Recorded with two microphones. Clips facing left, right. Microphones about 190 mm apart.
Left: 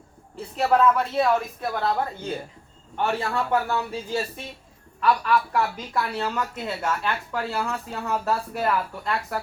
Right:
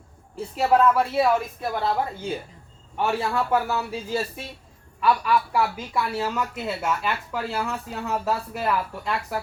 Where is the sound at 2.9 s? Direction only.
5° right (ahead or behind).